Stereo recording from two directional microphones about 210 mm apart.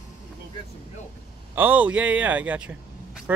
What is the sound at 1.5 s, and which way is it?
A man's voice, 10° right (ahead or behind).